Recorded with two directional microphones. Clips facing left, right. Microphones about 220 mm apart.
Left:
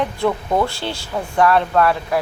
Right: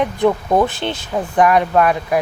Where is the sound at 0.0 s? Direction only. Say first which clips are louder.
Right 4 dB; 20° right (ahead or behind).